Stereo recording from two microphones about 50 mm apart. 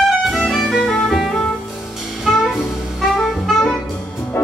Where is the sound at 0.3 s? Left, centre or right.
Centre.